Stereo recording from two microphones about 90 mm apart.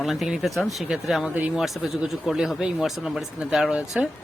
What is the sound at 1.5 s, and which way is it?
Speech, centre (ahead or behind).